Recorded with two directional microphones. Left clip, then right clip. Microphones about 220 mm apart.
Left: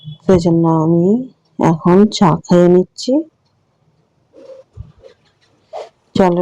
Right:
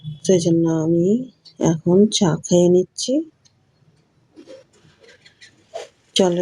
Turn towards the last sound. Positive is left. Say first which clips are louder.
# left 5 dB
turn(degrees=15)  # may be behind; listen again after turning